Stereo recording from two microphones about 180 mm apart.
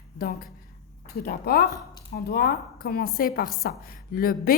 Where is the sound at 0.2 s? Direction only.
55° left (ahead or behind).